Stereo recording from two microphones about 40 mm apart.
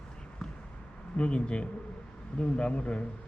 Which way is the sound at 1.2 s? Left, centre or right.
Left.